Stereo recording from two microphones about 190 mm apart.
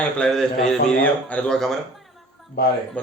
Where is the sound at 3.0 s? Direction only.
10° left (ahead or behind).